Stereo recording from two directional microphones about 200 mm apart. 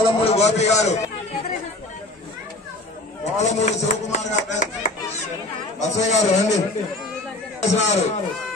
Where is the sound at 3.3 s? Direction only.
35° left (ahead or behind).